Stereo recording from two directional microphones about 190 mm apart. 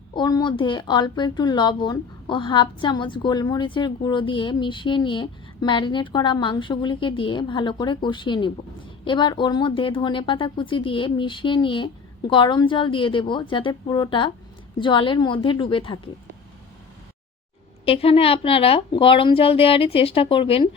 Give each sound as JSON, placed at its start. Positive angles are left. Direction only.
{"t": 0.1, "sound": "speech", "side_deg": 25}
{"t": 17.8, "sound": "speech", "side_deg": 30}